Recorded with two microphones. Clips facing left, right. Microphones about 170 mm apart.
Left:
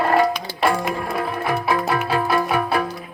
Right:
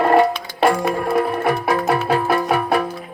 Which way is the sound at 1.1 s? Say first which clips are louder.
Right 5 dB; 45° right (ahead or behind).